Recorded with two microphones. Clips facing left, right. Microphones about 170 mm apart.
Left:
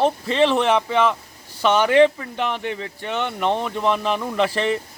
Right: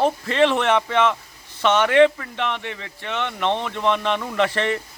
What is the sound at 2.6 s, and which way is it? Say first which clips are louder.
Speech: left 4 dB; 35° left (ahead or behind).